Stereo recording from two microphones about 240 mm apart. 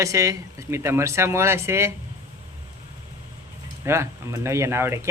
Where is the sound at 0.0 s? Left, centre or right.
Centre.